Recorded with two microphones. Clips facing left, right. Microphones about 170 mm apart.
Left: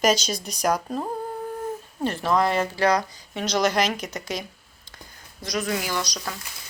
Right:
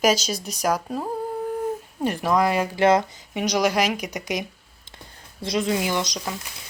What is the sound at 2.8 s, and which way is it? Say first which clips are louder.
Speech: right 6 dB; 25° right (ahead or behind).